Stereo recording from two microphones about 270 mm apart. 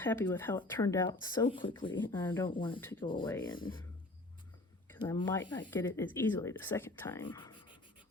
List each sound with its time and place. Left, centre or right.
0.0 s speech: centre
2.5 s speech: centre
4.9 s speech: centre